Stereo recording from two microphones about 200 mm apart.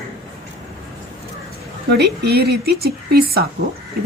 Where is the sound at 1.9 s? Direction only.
55° right (ahead or behind).